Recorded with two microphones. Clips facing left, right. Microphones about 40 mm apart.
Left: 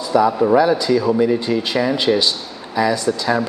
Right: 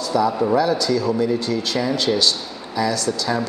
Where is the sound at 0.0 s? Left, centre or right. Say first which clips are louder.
Left 4 dB; centre.